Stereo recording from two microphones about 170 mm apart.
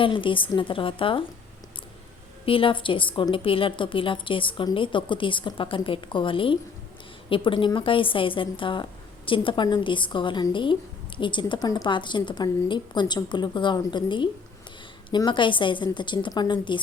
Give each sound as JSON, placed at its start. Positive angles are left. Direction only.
{"t": 0.0, "sound": "a woman's voice", "side_deg": 30}
{"t": 2.5, "sound": "a woman's voice", "side_deg": 30}